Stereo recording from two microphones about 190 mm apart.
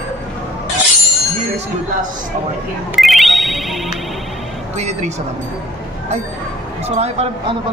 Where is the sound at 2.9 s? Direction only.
Centre (ahead or behind).